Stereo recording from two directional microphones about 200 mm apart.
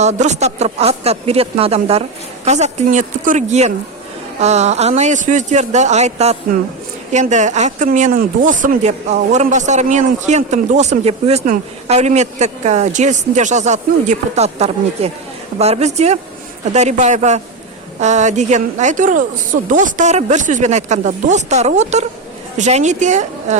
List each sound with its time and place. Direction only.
0.0 s speech: 35° right (ahead or behind)